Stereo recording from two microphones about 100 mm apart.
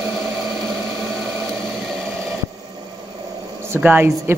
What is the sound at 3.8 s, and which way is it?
Speech, 15° right (ahead or behind).